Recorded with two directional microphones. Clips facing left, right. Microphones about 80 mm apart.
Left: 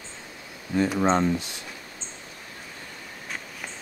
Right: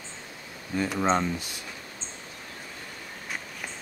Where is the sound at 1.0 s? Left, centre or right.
Left.